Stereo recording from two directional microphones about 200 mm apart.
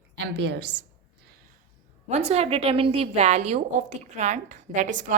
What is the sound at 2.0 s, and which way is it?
A woman's voice, 30° right (ahead or behind).